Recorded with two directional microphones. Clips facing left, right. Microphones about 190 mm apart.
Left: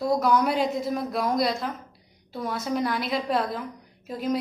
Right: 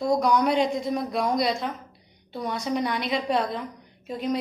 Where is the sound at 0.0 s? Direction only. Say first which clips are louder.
Right 1 dB; 5° left (ahead or behind).